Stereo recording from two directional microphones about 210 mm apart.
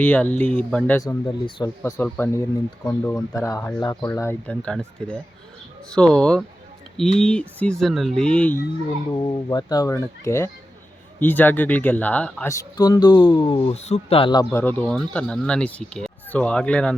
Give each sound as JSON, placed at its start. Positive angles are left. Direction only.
{"t": 0.0, "sound": "speech", "side_deg": 10}
{"t": 0.9, "sound": "speech", "side_deg": 20}
{"t": 9.1, "sound": "speech", "side_deg": 20}